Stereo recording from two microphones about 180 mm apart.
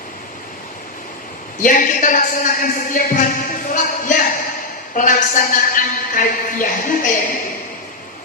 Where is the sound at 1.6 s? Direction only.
50° left (ahead or behind).